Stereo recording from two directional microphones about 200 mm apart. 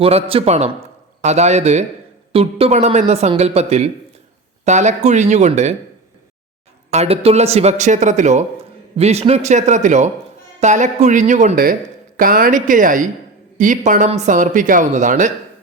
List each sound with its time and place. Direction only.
0.0 s a man's voice: 30° right (ahead or behind)
6.9 s speech: 30° right (ahead or behind)